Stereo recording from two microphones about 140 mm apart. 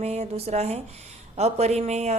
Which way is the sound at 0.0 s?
50° right (ahead or behind).